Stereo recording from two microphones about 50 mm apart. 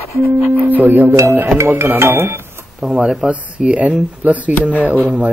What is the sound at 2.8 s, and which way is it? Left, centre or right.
Speech, centre.